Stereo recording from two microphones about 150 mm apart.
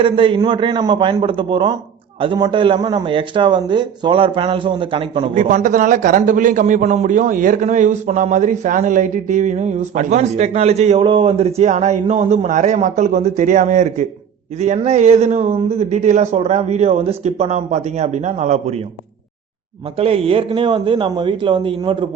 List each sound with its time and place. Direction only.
0.0 s a man's voice: 35° right (ahead or behind)
5.3 s a man's voice: 55° right (ahead or behind)
20.0 s a man's voice: 40° right (ahead or behind)